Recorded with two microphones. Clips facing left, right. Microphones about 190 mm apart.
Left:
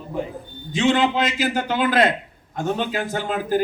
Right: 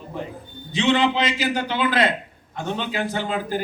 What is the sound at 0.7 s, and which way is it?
A man's voice, 45° left (ahead or behind).